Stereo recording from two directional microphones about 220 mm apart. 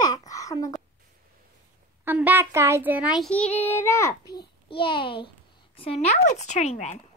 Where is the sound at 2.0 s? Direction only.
10° right (ahead or behind).